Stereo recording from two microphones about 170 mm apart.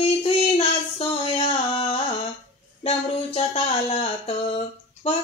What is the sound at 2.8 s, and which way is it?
Music, 40° left (ahead or behind).